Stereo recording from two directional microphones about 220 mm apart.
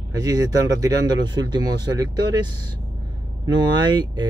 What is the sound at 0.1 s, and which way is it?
Speech, 15° right (ahead or behind).